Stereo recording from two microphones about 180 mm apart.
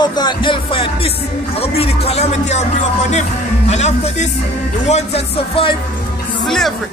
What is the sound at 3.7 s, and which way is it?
Speech, 40° left (ahead or behind).